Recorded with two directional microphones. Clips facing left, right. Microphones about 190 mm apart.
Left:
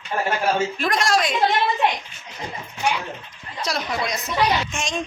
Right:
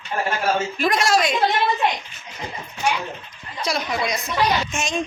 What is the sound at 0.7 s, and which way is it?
Speech, 5° right (ahead or behind).